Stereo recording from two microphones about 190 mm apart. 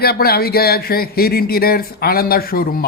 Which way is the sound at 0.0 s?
55° left (ahead or behind).